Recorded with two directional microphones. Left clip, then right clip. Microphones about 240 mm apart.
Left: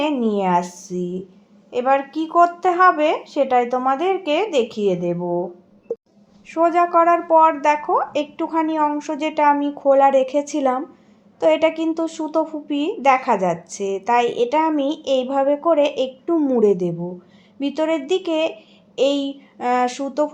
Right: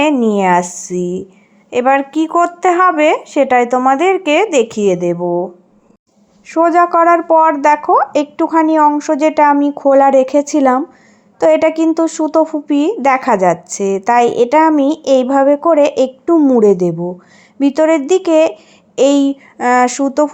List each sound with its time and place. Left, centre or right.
0.0 s a woman's voice: right
6.5 s a woman's voice: right